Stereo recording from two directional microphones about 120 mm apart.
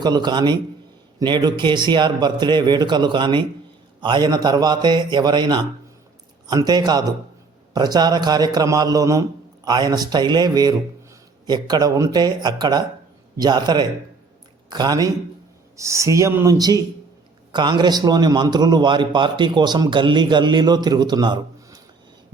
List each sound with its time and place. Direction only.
0.0 s a man's voice: 35° right (ahead or behind)